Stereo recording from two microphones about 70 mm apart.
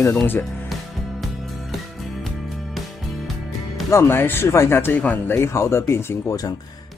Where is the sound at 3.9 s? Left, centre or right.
Left.